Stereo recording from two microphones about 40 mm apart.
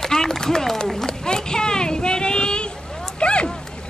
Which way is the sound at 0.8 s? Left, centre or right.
Centre.